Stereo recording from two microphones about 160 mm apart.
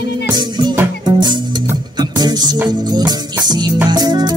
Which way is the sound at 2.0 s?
25° right (ahead or behind).